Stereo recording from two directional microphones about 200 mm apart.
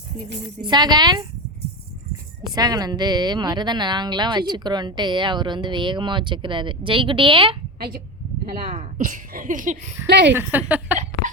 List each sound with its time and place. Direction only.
0.4 s speech: 20° right (ahead or behind)
2.6 s speech: 20° right (ahead or behind)
8.7 s speech: 40° right (ahead or behind)
10.1 s speech: 60° right (ahead or behind)
10.3 s a woman's voice: 10° right (ahead or behind)